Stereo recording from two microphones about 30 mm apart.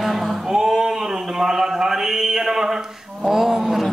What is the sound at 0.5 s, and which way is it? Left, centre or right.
Mantra, centre.